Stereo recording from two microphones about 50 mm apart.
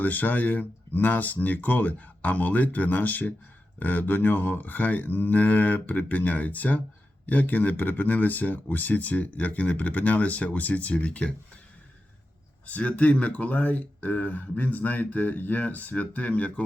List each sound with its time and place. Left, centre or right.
0.0 s speech: left
12.6 s speech: left